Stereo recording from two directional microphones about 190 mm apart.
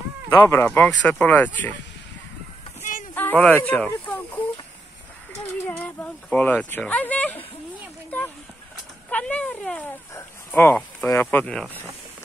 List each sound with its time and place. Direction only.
0.4 s speech: 15° left (ahead or behind)
2.8 s a sound: 40° left (ahead or behind)
3.2 s speech: 10° left (ahead or behind)
5.5 s speech: 10° left (ahead or behind)
9.1 s speech: 5° left (ahead or behind)